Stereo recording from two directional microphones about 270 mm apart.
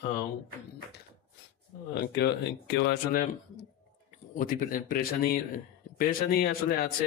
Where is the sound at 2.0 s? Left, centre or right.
Left.